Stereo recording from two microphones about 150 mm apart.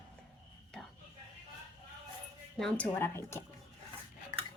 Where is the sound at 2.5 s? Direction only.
5° left (ahead or behind).